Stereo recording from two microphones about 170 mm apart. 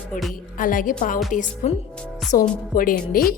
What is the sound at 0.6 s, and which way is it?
A woman's voice, 50° left (ahead or behind).